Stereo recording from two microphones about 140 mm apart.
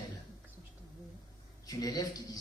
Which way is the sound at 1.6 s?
25° left (ahead or behind).